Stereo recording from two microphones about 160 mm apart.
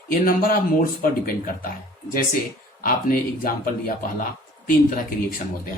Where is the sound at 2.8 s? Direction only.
60° left (ahead or behind).